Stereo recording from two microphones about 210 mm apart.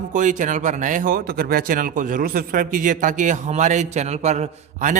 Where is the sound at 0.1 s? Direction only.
35° right (ahead or behind).